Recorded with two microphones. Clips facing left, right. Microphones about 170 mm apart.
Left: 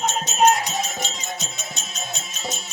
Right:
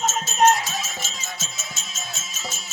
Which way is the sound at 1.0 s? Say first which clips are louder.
Left 5 dB; 20° left (ahead or behind).